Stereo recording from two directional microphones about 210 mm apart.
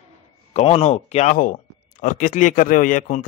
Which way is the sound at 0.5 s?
30° left (ahead or behind).